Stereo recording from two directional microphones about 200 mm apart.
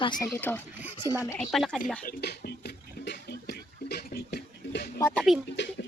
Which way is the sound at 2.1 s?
50° left (ahead or behind).